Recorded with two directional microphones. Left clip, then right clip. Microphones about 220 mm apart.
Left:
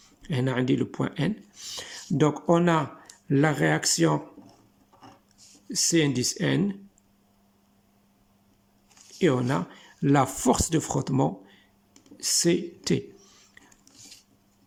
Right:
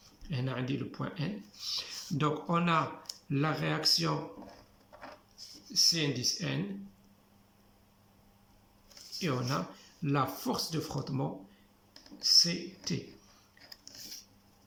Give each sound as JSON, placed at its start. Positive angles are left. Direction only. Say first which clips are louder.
{"t": 0.2, "sound": "speech", "louder": "left 10 dB", "side_deg": 45}
{"t": 5.8, "sound": "speech", "louder": "left 5 dB", "side_deg": 45}
{"t": 9.1, "sound": "speech", "louder": "left 10 dB", "side_deg": 40}